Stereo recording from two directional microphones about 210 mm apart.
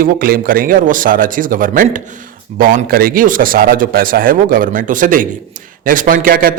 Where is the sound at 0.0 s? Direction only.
45° right (ahead or behind).